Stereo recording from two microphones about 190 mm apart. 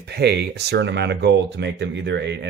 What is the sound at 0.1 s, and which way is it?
Speech, 60° right (ahead or behind).